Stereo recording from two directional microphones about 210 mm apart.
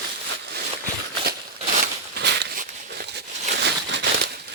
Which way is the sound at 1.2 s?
45° right (ahead or behind).